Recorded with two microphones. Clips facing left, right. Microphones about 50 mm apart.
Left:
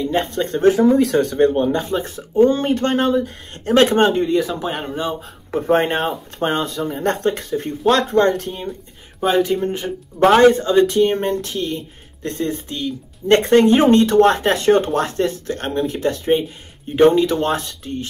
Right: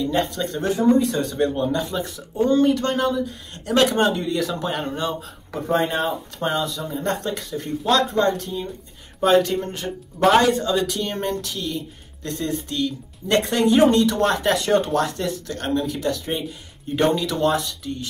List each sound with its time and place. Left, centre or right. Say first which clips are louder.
0.0 s speech: left 2 dB; left
0.9 s speech: left 5 dB; left
1.2 s speech: left 6 dB; left; by 5.1 s centre
5.2 s speech: left 7 dB; left
9.2 s speech: left 1 dB; centre
10.2 s speech: left 5 dB; left
12.6 s speech: right 1 dB; left
13.3 s speech: left 6 dB; left